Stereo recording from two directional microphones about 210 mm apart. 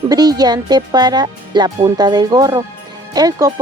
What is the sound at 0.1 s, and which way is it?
Speech, 20° right (ahead or behind).